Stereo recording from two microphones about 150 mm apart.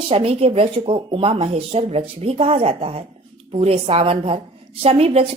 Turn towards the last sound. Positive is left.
turn(degrees=-40)  # may be behind; listen again after turning